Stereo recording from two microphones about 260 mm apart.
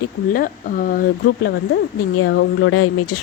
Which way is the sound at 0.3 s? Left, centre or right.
Left.